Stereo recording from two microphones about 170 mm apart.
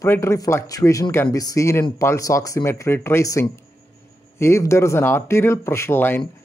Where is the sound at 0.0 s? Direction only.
15° left (ahead or behind).